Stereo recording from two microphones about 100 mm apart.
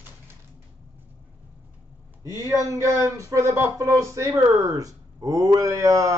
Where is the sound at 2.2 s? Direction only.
35° right (ahead or behind).